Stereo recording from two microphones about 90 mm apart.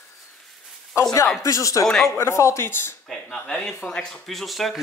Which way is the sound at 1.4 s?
35° left (ahead or behind).